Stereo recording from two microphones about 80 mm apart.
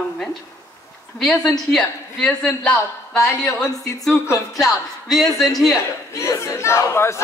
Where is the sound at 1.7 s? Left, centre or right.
Centre.